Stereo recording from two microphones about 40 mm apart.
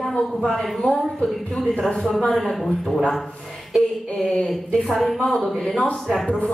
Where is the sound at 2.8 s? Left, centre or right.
Centre.